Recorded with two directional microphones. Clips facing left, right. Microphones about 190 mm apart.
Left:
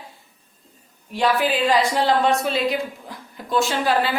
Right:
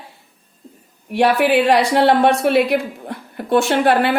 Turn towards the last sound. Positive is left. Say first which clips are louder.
# right 6 dB
turn(degrees=-65)  # may be behind; listen again after turning